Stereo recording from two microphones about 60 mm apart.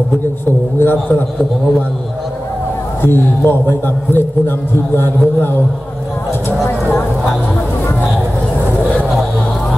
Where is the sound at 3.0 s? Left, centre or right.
Left.